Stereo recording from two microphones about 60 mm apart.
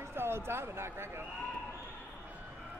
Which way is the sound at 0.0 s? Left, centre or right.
Right.